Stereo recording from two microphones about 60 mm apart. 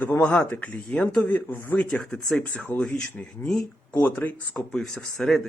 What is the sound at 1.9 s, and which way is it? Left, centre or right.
Speech, centre.